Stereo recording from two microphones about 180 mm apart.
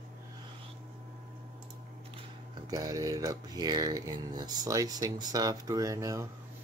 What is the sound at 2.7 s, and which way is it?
Speech, 20° right (ahead or behind).